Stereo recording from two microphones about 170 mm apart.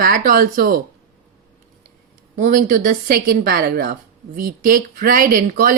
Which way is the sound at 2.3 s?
50° right (ahead or behind).